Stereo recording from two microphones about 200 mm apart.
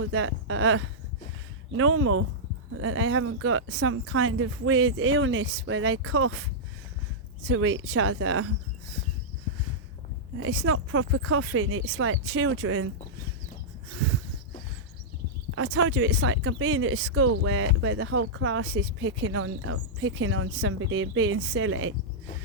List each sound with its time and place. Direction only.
0.1 s speech: 90° right
10.4 s speech: 85° right
15.5 s speech: 90° right